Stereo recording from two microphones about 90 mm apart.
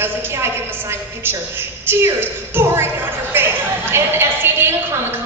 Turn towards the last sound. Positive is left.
turn(degrees=-25)  # may be behind; listen again after turning